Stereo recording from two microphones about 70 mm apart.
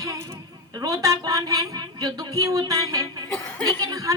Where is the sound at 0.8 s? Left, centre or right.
Right.